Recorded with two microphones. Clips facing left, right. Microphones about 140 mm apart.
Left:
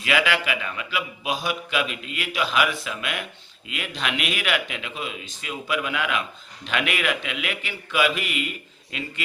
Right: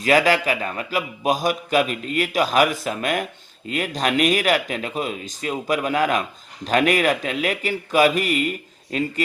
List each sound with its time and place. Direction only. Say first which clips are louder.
0.0 s a man's voice: right 6 dB; 40° right (ahead or behind)